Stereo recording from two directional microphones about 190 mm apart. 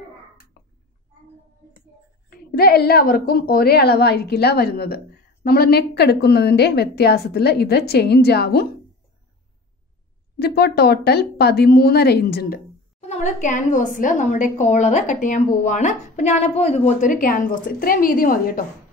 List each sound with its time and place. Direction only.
2.2 s a woman's voice: 55° left (ahead or behind)
10.4 s a woman's voice: 55° left (ahead or behind)
13.0 s a woman's voice: 35° left (ahead or behind)